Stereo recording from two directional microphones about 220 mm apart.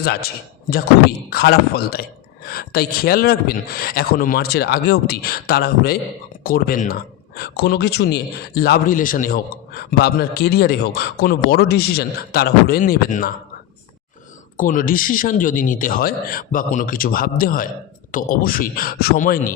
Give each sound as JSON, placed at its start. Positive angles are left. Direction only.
{"t": 0.0, "sound": "a man's voice", "side_deg": 45}
{"t": 1.3, "sound": "a man's voice", "side_deg": 45}
{"t": 14.5, "sound": "speech", "side_deg": 35}